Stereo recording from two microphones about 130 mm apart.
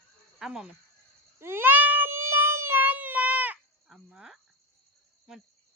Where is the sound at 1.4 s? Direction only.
20° right (ahead or behind).